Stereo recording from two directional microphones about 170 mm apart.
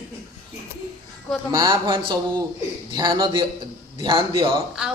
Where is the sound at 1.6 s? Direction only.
30° right (ahead or behind).